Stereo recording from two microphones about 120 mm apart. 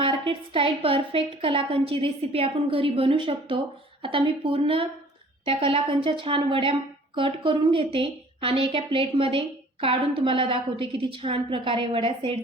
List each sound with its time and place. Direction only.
0.0 s a woman's voice: 45° right (ahead or behind)